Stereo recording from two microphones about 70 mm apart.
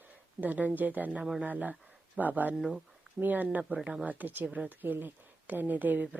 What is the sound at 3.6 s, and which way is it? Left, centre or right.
Speech, centre.